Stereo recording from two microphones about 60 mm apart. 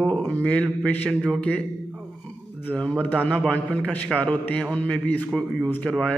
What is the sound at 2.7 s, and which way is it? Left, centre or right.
A man's voice, left.